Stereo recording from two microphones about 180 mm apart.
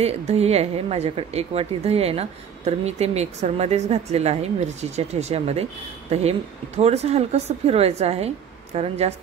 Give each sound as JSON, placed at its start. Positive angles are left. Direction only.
{"t": 0.0, "sound": "a woman's voice", "side_deg": -35}